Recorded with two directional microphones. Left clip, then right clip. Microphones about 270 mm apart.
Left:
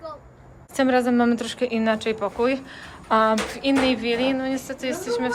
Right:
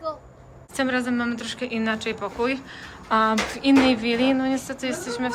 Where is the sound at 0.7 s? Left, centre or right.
Centre.